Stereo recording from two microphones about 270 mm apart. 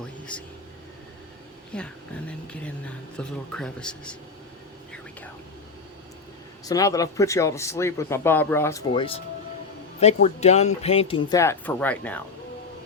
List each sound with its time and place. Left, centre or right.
0.3 s speech: centre
1.7 s speech: centre
6.7 s speech: centre
8.9 s speech: centre
10.2 s speech: left; by 12.2 s centre